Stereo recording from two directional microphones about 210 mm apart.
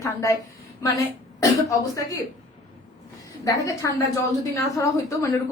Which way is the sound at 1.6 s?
15° left (ahead or behind).